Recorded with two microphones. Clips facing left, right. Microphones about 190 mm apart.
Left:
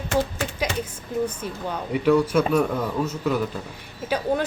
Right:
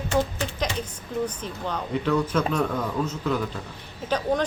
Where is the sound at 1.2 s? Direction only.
10° left (ahead or behind).